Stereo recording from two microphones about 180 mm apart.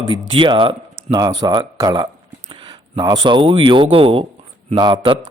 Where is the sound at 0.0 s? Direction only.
25° right (ahead or behind).